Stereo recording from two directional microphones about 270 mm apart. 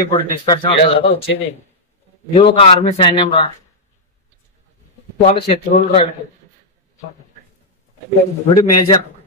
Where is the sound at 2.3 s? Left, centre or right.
Left.